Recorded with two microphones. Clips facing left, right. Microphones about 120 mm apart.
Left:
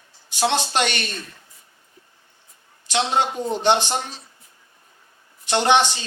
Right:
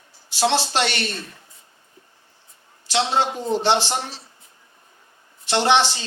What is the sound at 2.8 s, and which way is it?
A woman's voice, 15° left (ahead or behind).